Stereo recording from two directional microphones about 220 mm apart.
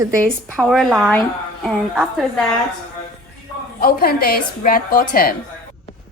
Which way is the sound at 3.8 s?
45° left (ahead or behind).